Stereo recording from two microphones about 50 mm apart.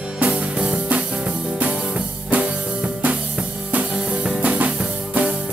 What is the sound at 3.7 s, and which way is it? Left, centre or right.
Music, right.